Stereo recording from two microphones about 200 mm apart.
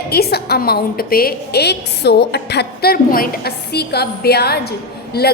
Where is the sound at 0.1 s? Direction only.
50° left (ahead or behind).